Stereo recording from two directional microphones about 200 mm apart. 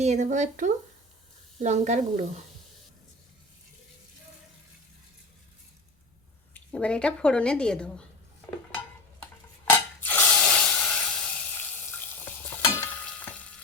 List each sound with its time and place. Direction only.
0.0 s speech: 35° right (ahead or behind)
6.5 s speech: 5° left (ahead or behind)
9.6 s a sound: 10° left (ahead or behind)
12.8 s frying: 5° left (ahead or behind)